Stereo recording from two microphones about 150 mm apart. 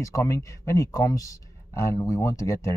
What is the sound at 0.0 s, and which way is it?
Speech, 20° left (ahead or behind).